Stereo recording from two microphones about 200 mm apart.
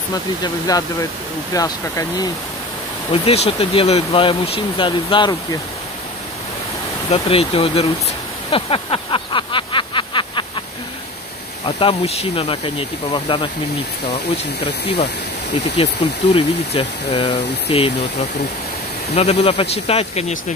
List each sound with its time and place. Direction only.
0.1 s speech: 20° left (ahead or behind)
3.1 s speech: 30° left (ahead or behind)
7.1 s speech: 30° left (ahead or behind)
8.5 s a sound: 25° left (ahead or behind)
11.6 s speech: 30° left (ahead or behind)
16.0 s speech: 25° left (ahead or behind)
19.1 s speech: 30° left (ahead or behind)